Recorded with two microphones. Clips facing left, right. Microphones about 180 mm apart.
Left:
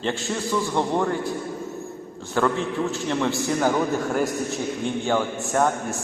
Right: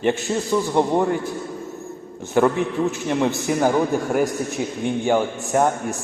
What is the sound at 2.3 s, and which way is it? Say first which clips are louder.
A man's voice: right 4 dB; 15° right (ahead or behind).